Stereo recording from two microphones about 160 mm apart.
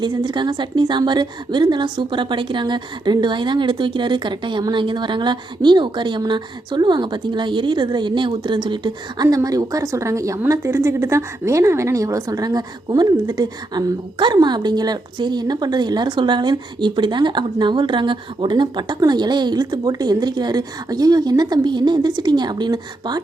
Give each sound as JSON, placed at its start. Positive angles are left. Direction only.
{"t": 0.0, "sound": "a woman's voice", "side_deg": -30}